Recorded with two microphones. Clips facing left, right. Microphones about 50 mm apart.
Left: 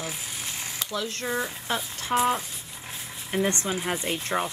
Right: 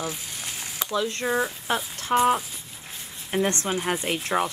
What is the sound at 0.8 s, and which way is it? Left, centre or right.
Speech, centre.